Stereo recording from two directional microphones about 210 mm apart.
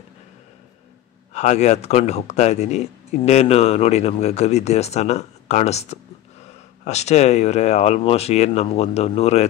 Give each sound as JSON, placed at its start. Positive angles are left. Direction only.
{"t": 1.3, "sound": "speech", "side_deg": 35}